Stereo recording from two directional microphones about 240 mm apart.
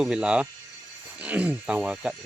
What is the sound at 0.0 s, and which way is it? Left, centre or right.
Speech, centre.